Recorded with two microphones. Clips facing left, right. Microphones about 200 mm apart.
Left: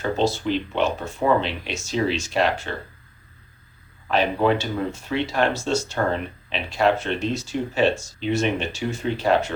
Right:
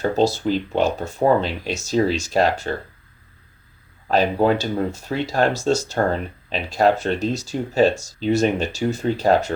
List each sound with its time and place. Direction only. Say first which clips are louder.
0.0 s speech: right 3 dB; 40° right (ahead or behind)
4.1 s speech: right 2 dB; 40° right (ahead or behind)